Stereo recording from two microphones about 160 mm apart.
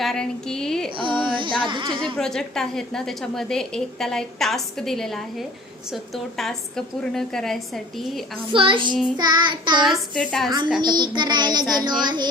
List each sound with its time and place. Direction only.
0.0 s a woman's voice: 5° left (ahead or behind)
1.0 s a sound: 30° right (ahead or behind)
2.1 s a woman's voice: 5° left (ahead or behind)
8.5 s a child's voice: 30° right (ahead or behind)
9.1 s child singing: 25° right (ahead or behind)
9.8 s a woman's voice: centre (ahead or behind)
10.8 s child singing: 25° right (ahead or behind)